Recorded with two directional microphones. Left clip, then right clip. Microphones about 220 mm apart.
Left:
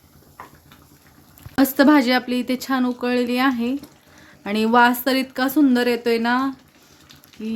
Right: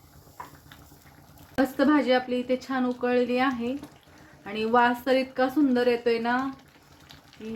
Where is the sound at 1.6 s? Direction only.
55° left (ahead or behind).